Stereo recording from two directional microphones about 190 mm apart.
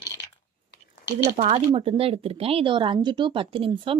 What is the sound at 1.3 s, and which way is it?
Speech, 35° right (ahead or behind).